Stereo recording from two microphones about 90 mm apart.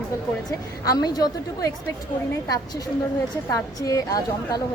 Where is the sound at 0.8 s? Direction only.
45° left (ahead or behind).